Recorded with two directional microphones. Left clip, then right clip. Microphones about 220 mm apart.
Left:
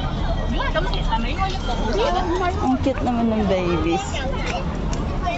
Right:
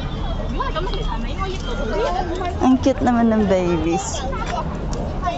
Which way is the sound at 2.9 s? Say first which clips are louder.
Right 4 dB; 25° right (ahead or behind).